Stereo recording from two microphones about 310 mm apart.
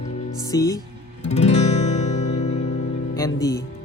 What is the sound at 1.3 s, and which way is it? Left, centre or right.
Guitar, left.